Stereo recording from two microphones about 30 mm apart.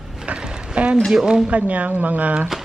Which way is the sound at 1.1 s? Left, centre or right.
Right.